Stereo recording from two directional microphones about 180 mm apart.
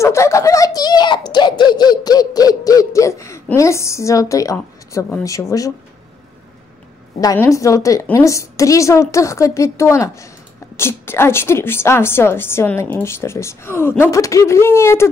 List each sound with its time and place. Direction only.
0.0 s a sound: 15° left (ahead or behind)
5.2 s a woman's voice: 20° left (ahead or behind)
7.2 s a woman's voice: 20° left (ahead or behind)